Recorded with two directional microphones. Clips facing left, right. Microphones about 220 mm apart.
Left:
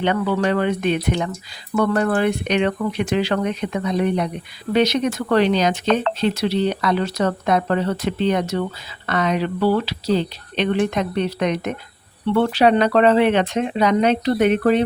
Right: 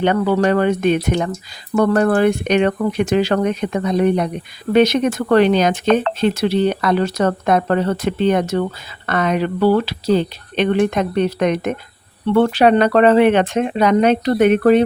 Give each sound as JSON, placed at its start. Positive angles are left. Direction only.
{"t": 0.0, "sound": "speech", "side_deg": -45}